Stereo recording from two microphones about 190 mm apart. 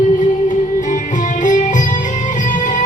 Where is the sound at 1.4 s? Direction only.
40° left (ahead or behind).